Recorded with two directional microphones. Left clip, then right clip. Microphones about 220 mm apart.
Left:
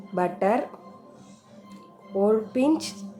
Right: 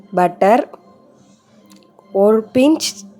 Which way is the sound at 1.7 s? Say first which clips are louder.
Right 10 dB; 35° right (ahead or behind).